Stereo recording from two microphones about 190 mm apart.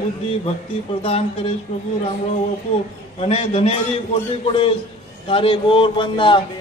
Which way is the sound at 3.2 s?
30° left (ahead or behind).